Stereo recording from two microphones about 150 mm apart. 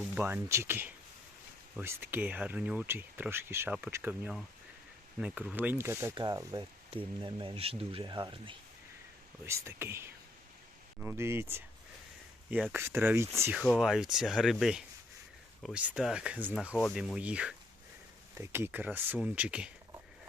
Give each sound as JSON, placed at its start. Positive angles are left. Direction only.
{"t": 0.1, "sound": "speech", "side_deg": -15}
{"t": 6.1, "sound": "speech", "side_deg": -25}
{"t": 9.5, "sound": "speech", "side_deg": -20}
{"t": 12.5, "sound": "speech", "side_deg": 0}
{"t": 12.7, "sound": "speech", "side_deg": -15}
{"t": 13.6, "sound": "speech", "side_deg": 0}